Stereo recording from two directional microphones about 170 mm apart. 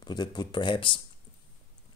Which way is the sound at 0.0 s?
25° left (ahead or behind).